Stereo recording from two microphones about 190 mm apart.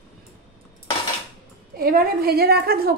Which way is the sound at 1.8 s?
50° right (ahead or behind).